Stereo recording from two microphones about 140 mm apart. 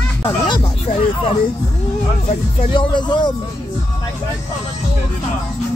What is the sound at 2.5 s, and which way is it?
Speech, 35° left (ahead or behind).